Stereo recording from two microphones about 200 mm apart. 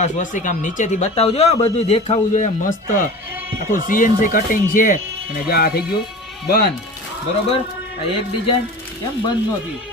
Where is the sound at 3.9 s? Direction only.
45° left (ahead or behind).